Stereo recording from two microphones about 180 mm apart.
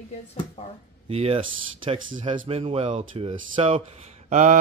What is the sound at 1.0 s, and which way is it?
Speech, 35° right (ahead or behind).